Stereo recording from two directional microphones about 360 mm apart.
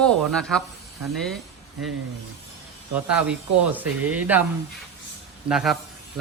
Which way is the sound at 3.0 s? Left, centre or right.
Centre.